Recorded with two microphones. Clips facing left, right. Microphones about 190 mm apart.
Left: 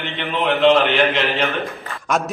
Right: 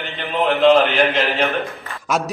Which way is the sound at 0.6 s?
40° right (ahead or behind).